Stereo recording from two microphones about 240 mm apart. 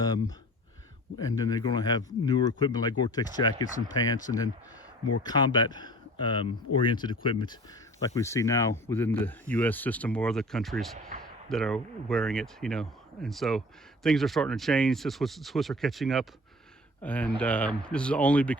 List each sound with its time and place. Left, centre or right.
0.0 s speech: centre
1.4 s speech: centre